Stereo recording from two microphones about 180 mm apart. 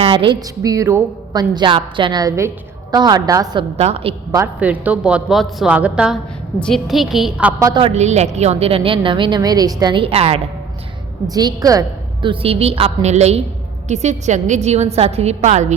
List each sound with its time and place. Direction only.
0.0 s a woman's voice: 30° right (ahead or behind)
3.8 s a woman's voice: 35° right (ahead or behind)
4.6 s a woman's voice: 10° right (ahead or behind)
7.6 s a woman's voice: 25° right (ahead or behind)
11.3 s a woman's voice: 20° right (ahead or behind); by 15.7 s 40° right (ahead or behind)